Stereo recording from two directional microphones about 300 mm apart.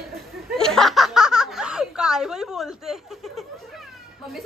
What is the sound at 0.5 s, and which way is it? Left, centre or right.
Snicker, centre.